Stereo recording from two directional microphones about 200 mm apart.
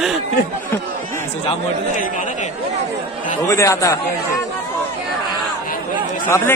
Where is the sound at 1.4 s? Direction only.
40° left (ahead or behind).